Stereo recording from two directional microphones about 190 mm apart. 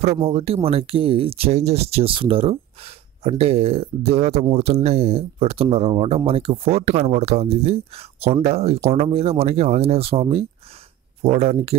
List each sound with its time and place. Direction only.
0.2 s speech: 30° right (ahead or behind)